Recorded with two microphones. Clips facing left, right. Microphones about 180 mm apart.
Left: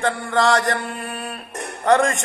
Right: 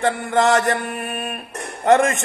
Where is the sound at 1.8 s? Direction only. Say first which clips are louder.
Right 2 dB; 20° right (ahead or behind).